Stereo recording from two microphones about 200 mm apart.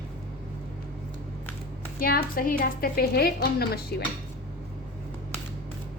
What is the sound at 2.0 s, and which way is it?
A woman's voice, 50° left (ahead or behind).